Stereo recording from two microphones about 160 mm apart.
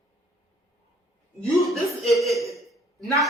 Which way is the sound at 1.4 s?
Centre (ahead or behind).